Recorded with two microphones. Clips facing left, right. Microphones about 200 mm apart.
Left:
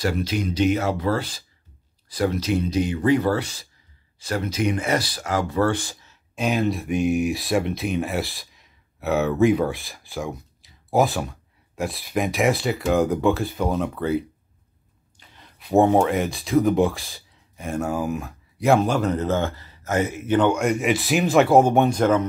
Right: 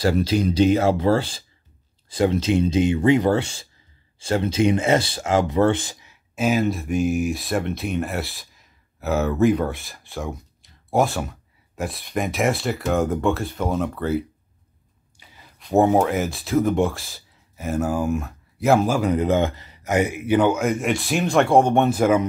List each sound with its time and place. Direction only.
0.0 s speech: 30° right (ahead or behind); by 22.2 s 5° right (ahead or behind)